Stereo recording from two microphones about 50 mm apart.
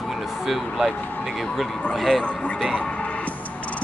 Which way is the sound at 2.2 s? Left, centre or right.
Left.